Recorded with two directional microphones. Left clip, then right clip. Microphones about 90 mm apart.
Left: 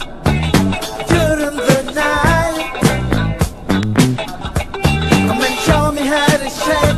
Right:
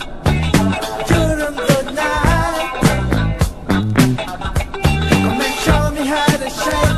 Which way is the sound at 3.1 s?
15° left (ahead or behind).